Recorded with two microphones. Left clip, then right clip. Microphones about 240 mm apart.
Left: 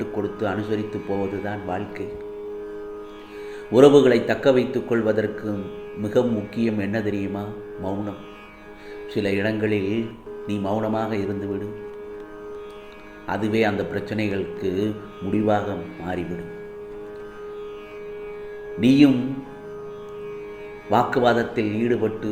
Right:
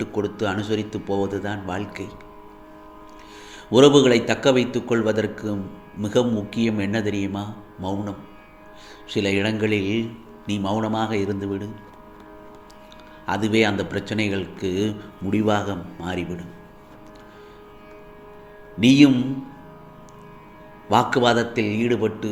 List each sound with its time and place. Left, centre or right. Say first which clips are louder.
0.0 s speech: right 1 dB; right
3.7 s speech: even; right
9.1 s speech: right 1 dB; right
13.2 s speech: right 2 dB; right
18.8 s speech: right 1 dB; right
20.9 s speech: right 1 dB; right